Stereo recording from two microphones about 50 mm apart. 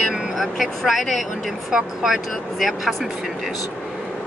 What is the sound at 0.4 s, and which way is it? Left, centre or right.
Speech, centre.